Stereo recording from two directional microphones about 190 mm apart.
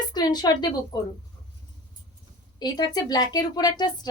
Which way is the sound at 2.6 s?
20° left (ahead or behind).